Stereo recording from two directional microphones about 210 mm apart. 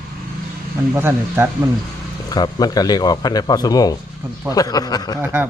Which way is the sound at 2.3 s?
20° left (ahead or behind).